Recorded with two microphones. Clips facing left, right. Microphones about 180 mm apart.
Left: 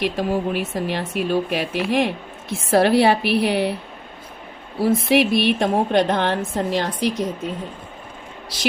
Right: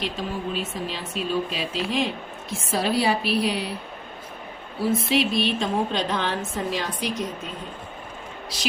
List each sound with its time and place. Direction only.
0.0 s a woman's voice: 65° left (ahead or behind)
4.8 s a woman's voice: 65° left (ahead or behind)